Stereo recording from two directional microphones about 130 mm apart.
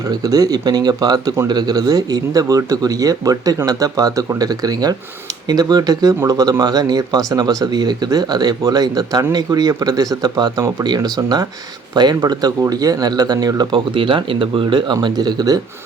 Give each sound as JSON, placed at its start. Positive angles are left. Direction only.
{"t": 0.1, "sound": "speech", "side_deg": -30}